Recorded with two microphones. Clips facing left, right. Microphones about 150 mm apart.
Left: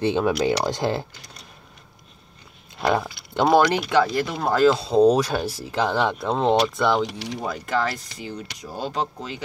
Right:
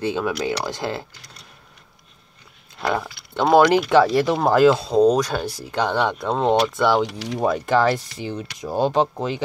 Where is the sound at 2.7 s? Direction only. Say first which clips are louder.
Left 2 dB; 15° left (ahead or behind).